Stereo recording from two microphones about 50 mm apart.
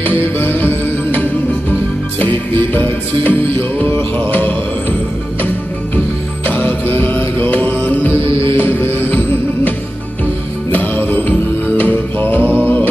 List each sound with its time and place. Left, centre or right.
0.0 s music: left
2.1 s music: left
6.4 s music: left
10.7 s music: left